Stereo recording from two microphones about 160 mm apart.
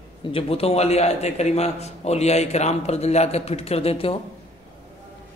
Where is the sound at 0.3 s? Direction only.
35° left (ahead or behind).